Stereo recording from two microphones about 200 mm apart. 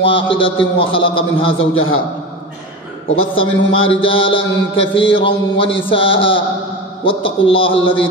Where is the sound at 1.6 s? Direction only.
90° left.